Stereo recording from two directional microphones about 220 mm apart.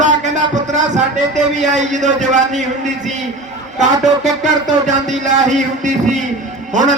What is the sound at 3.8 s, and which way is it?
A man's voice, 30° right (ahead or behind).